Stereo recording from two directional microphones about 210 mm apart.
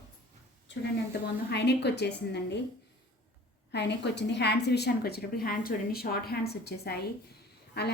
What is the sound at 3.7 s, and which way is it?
A woman's voice, 55° left (ahead or behind).